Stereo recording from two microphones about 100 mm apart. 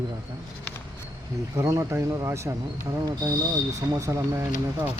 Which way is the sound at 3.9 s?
35° right (ahead or behind).